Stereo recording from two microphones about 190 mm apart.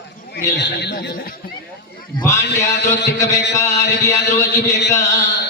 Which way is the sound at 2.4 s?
65° left (ahead or behind).